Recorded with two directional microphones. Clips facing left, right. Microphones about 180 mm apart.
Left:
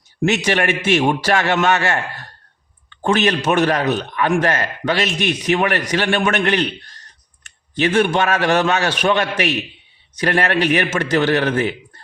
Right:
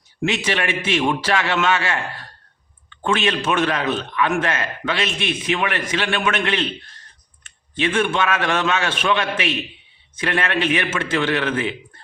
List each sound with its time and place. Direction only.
0.2 s a man's voice: 45° left (ahead or behind)